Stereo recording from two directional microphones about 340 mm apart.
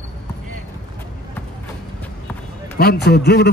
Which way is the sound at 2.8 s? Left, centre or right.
Left.